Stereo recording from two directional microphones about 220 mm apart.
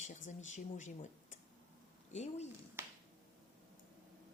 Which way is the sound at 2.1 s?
30° left (ahead or behind).